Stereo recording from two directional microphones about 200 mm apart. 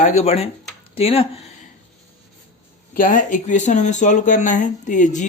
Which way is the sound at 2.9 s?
40° left (ahead or behind).